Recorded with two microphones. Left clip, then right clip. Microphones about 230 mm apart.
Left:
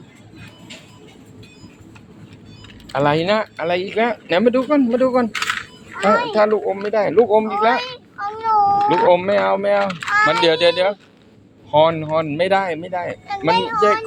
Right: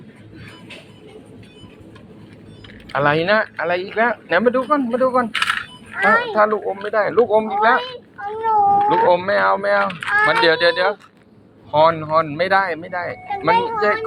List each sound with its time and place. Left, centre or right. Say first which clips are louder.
2.9 s speech: right 1 dB; centre; by 5.3 s left
5.3 s coin: right 2 dB; centre
6.2 s speech: left 1 dB; left
7.8 s a sound: left 1 dB; centre
9.1 s speech: even; left
10.2 s speech: even; left